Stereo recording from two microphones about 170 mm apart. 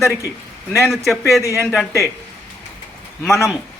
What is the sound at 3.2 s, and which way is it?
Speech, centre (ahead or behind).